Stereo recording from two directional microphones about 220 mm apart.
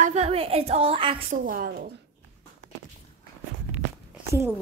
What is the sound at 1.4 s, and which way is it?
Speech, 40° right (ahead or behind).